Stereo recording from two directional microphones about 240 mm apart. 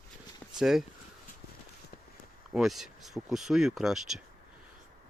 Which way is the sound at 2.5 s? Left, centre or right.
Centre.